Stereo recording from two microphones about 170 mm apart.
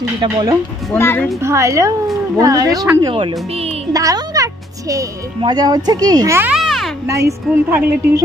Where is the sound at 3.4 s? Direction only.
35° right (ahead or behind).